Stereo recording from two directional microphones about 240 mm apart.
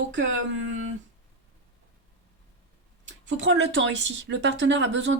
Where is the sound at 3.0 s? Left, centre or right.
Right.